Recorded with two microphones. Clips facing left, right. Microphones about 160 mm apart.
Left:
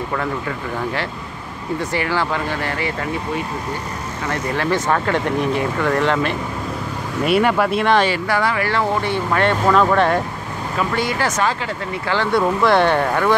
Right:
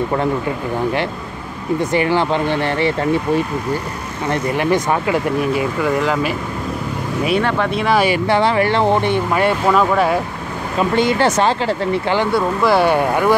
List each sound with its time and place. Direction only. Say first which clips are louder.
1.8 s speech: right 5 dB; 20° right (ahead or behind)
4.6 s speech: right 1 dB; 15° right (ahead or behind)
7.2 s speech: left 2 dB; 5° left (ahead or behind)
8.3 s speech: right 5 dB; 25° right (ahead or behind); by 10.2 s 5° right (ahead or behind)
10.8 s speech: right 6 dB; 25° right (ahead or behind)
12.3 s speech: left 3 dB; 5° right (ahead or behind)